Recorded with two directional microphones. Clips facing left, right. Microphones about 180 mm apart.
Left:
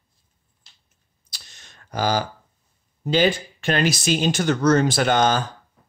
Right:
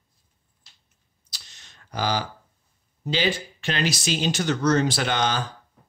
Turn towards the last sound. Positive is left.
turn(degrees=45)  # may be behind; listen again after turning